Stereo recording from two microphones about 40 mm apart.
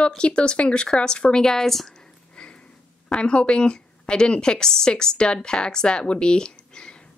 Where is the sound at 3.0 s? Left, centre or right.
Left.